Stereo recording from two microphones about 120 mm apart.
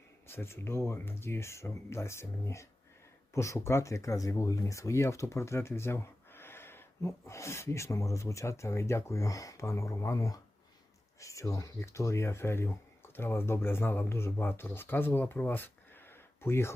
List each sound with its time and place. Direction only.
0.3 s speech: 20° left (ahead or behind)